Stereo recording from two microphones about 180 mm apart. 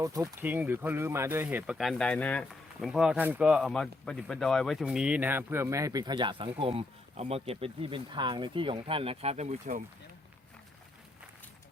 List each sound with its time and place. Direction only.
0.0 s speech: 20° right (ahead or behind); by 9.8 s 40° right (ahead or behind)